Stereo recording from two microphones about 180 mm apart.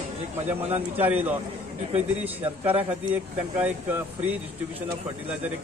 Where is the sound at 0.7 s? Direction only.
10° right (ahead or behind).